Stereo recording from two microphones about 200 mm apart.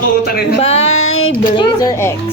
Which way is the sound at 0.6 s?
30° left (ahead or behind).